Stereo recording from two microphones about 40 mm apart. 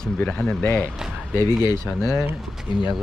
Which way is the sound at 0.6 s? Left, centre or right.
Left.